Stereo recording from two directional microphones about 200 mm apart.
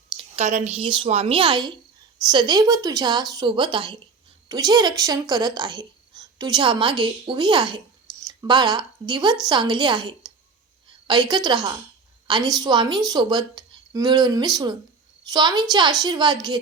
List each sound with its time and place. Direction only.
0.3 s a woman's voice: 35° right (ahead or behind)